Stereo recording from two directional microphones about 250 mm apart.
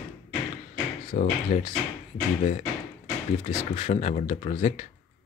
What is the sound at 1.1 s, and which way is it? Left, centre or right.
Speech, left.